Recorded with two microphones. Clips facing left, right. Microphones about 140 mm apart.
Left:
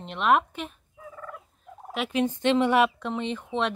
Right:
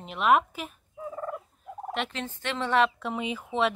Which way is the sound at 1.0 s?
35° right (ahead or behind).